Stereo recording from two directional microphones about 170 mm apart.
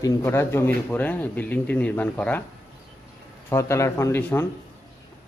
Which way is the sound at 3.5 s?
15° left (ahead or behind).